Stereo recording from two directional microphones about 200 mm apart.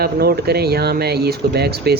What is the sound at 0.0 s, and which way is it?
Speech, 50° right (ahead or behind).